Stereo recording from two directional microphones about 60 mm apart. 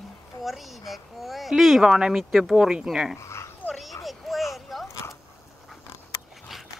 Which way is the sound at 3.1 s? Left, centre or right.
Left.